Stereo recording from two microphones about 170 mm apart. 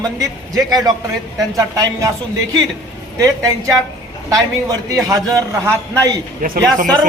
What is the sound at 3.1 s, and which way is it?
Speech, 20° right (ahead or behind).